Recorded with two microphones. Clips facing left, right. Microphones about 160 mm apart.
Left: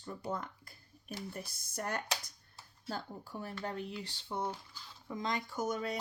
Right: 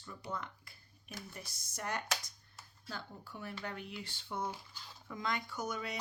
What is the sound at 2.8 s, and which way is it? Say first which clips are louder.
Speech: left 5 dB; 40° left (ahead or behind).